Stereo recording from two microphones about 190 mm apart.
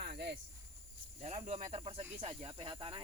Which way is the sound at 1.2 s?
35° right (ahead or behind).